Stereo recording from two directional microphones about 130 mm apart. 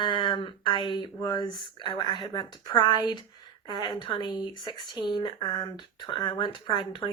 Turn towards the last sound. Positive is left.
turn(degrees=35)  # may be behind; listen again after turning